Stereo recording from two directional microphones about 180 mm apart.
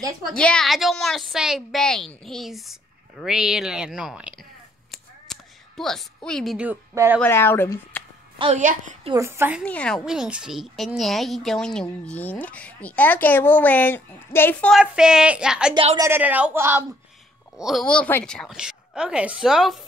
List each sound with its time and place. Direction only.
0.4 s a woman's voice: 5° left (ahead or behind)
4.9 s a sound: centre (ahead or behind)
7.2 s a woman's voice: 10° left (ahead or behind)
8.5 s a child's voice: 45° right (ahead or behind)
9.1 s speech: 15° right (ahead or behind)
9.7 s a woman's voice: 5° left (ahead or behind)
10.0 s a woman's voice: 5° right (ahead or behind)
14.8 s a woman's voice: 5° right (ahead or behind)
15.7 s a woman's voice: 30° right (ahead or behind)
16.0 s speech: 10° right (ahead or behind)
17.6 s a woman's voice: centre (ahead or behind)